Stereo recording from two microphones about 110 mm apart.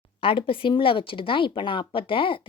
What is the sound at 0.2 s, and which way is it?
Speech, 55° left (ahead or behind).